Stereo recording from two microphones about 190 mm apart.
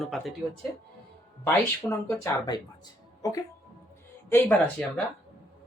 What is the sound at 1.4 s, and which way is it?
Speech, 15° left (ahead or behind).